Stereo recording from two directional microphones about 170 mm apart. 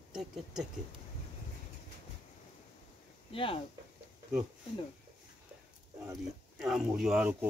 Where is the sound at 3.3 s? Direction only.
30° left (ahead or behind).